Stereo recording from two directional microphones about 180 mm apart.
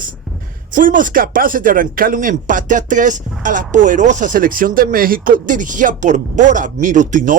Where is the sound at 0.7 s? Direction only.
50° right (ahead or behind).